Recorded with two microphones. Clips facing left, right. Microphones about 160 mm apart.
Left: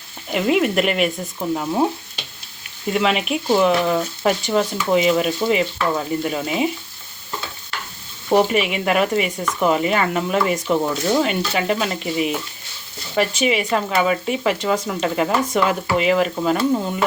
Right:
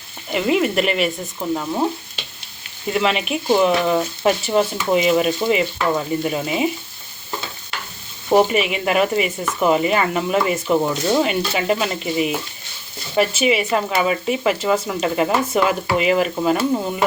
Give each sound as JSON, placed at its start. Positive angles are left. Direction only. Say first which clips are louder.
{"t": 0.3, "sound": "speech", "louder": "even", "side_deg": 0}
{"t": 2.9, "sound": "speech", "louder": "even", "side_deg": 0}
{"t": 8.3, "sound": "speech", "louder": "right 1 dB", "side_deg": 0}